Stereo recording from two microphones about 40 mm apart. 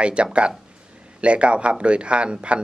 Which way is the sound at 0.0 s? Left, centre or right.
Right.